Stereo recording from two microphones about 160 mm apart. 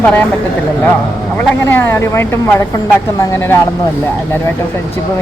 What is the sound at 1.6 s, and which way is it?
A woman's voice, 15° left (ahead or behind).